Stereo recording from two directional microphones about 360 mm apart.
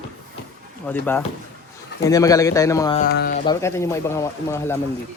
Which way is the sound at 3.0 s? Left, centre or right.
Left.